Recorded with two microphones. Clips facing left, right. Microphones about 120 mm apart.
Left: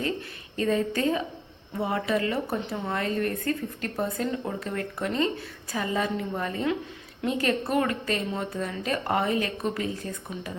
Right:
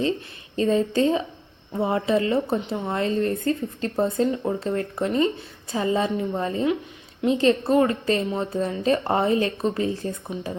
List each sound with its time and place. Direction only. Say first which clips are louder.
0.5 s speech: right 5 dB; 25° right (ahead or behind)